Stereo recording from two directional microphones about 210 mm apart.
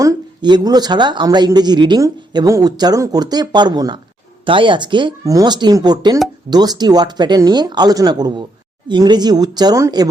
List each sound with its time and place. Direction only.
0.0 s speech: 20° right (ahead or behind)